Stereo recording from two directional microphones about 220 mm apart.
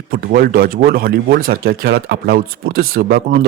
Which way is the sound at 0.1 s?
40° right (ahead or behind).